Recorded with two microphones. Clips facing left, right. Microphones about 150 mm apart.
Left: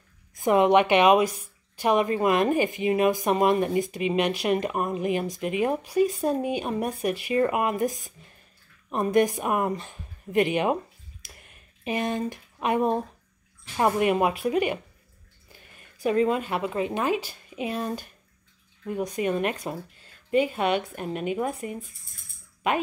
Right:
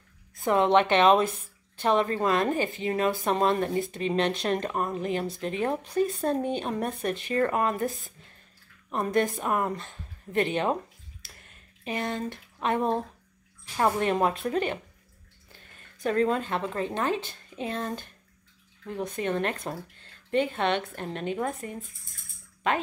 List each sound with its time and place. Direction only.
0.3 s a woman's voice: 15° left (ahead or behind)
11.2 s a sound: 15° left (ahead or behind)
13.7 s a woman's voice: 15° left (ahead or behind)